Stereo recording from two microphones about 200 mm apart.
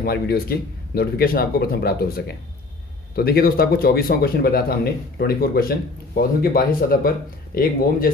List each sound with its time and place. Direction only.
0.0 s a man's voice: 50° left (ahead or behind)